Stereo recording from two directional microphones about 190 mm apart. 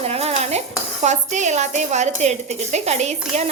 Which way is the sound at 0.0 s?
30° right (ahead or behind).